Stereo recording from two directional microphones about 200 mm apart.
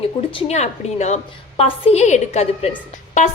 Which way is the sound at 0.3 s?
30° left (ahead or behind).